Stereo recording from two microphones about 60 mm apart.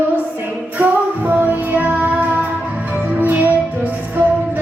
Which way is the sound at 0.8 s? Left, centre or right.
Right.